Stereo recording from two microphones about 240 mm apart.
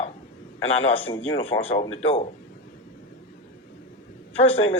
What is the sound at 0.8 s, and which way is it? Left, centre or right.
A man's voice, left.